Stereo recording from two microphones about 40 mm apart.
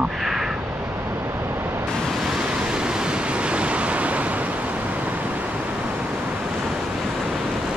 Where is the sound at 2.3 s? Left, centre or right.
Right.